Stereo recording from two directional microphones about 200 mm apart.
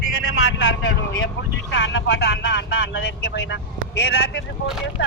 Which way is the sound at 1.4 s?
65° left (ahead or behind).